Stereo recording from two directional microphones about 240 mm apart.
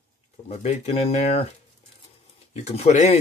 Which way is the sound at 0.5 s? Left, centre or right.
Left.